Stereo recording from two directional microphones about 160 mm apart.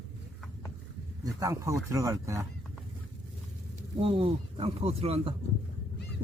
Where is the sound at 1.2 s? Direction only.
20° right (ahead or behind).